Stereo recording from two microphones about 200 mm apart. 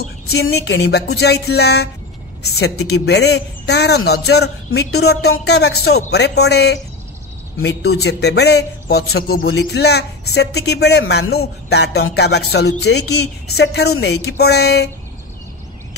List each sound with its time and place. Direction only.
0.0 s speech: 55° left (ahead or behind)
5.9 s speech: 75° left (ahead or behind); by 6.8 s 55° left (ahead or behind)
7.5 s speech: 75° left (ahead or behind); by 9.5 s 50° left (ahead or behind)
9.5 s speech: 65° left (ahead or behind)